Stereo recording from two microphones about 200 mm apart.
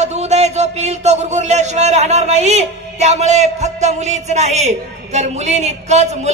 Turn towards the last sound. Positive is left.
turn(degrees=-35)  # may be behind; listen again after turning